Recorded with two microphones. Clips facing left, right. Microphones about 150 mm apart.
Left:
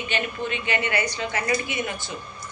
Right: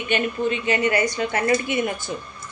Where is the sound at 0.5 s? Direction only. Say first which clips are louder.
Right 7 dB; 35° right (ahead or behind); by 1.8 s 50° right (ahead or behind).